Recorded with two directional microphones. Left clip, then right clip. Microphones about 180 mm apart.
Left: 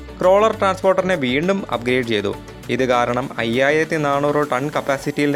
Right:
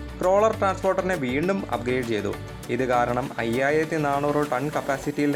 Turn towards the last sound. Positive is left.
turn(degrees=35)  # may be behind; listen again after turning